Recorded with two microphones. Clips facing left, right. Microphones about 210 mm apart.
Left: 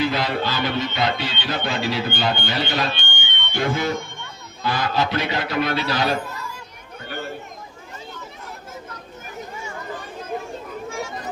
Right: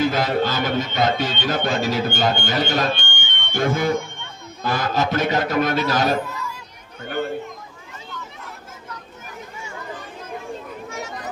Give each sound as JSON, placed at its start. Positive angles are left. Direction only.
{"t": 0.0, "sound": "music", "side_deg": -45}